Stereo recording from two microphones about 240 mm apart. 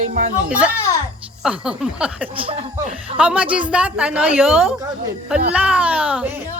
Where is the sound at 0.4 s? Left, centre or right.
Centre.